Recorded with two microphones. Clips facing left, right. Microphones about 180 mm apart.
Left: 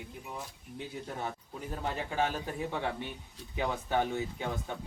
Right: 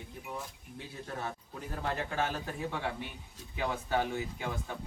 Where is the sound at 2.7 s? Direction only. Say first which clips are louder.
Left 2 dB; 20° left (ahead or behind).